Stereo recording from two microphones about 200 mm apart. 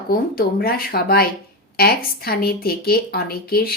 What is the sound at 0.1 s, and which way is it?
A woman's voice, 50° left (ahead or behind).